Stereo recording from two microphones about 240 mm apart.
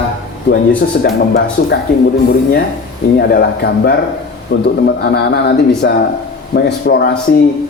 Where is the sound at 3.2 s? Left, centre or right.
Left.